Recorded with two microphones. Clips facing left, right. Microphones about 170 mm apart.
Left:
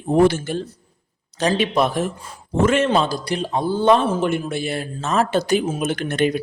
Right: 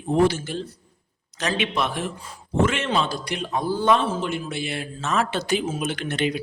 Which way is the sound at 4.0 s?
55° left (ahead or behind).